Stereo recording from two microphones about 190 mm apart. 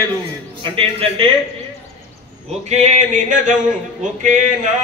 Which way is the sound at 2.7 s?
40° right (ahead or behind).